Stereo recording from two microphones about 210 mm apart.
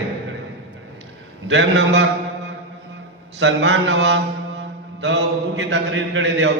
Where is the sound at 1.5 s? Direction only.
60° right (ahead or behind).